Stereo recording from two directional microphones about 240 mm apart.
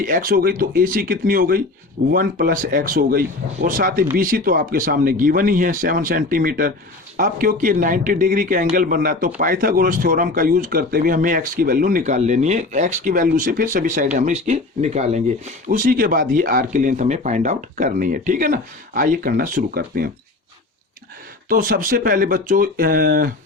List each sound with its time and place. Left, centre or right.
0.0 s speech: right
21.5 s speech: right